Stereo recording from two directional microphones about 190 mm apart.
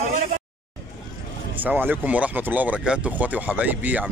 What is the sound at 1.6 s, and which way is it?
Speech, 10° right (ahead or behind).